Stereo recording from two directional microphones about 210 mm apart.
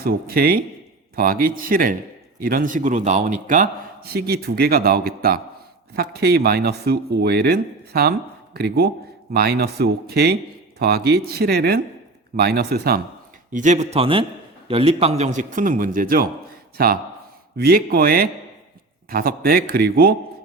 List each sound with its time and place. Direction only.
0.0 s a man's voice: 45° right (ahead or behind)
13.5 s a man's voice: 35° right (ahead or behind)